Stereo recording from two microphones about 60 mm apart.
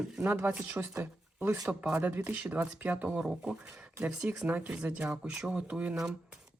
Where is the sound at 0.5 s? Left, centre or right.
Right.